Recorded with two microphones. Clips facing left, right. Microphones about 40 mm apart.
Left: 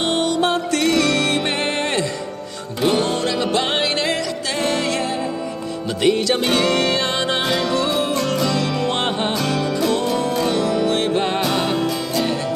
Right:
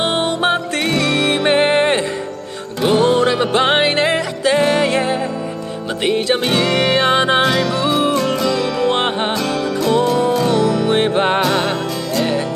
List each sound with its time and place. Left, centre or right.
0.0 s music: right
0.9 s music: centre
2.8 s music: centre
3.1 s music: right
6.4 s music: centre; by 7.4 s right
7.4 s music: centre
8.9 s music: right
9.4 s music: centre
10.8 s music: right
11.4 s music: centre